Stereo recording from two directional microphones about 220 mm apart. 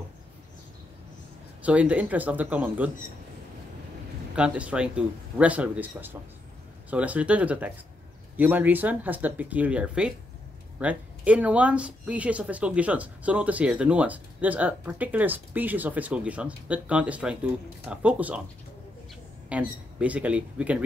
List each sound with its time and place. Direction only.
1.6 s speech: 5° right (ahead or behind)
4.4 s a man's voice: 5° right (ahead or behind)
19.5 s speech: 5° right (ahead or behind)